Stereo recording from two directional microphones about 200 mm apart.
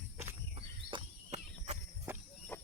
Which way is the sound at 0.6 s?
30° right (ahead or behind).